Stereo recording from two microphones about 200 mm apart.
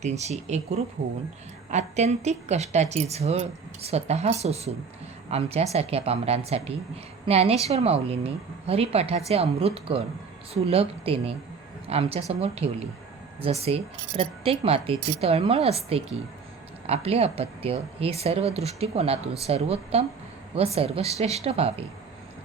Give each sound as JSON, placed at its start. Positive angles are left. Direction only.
{"t": 0.0, "sound": "speech", "side_deg": -35}
{"t": 1.7, "sound": "speech", "side_deg": -35}